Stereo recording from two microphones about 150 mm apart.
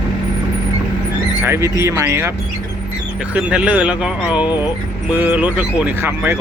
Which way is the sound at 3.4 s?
10° right (ahead or behind).